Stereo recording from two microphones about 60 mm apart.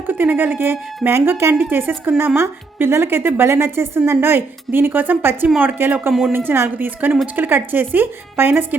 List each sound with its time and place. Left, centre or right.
0.1 s a woman's voice: right